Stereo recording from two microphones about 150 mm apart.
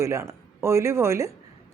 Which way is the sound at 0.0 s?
20° right (ahead or behind).